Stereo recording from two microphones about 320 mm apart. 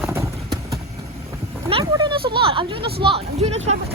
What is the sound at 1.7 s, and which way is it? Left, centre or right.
Speech, centre.